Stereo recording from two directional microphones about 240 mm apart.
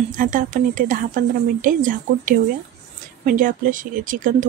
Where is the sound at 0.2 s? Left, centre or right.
Right.